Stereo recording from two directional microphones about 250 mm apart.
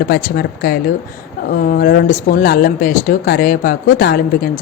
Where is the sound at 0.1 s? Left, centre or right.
Left.